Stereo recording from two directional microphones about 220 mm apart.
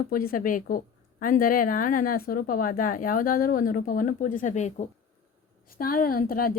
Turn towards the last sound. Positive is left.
turn(degrees=40)  # may be behind; listen again after turning